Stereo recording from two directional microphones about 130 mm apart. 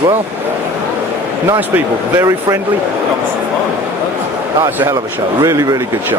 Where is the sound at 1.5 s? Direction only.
15° right (ahead or behind).